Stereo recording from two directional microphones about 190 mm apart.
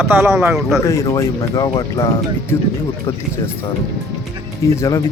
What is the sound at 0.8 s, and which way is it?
Speech, 15° left (ahead or behind).